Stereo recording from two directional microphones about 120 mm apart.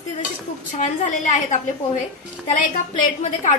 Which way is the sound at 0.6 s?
90° left.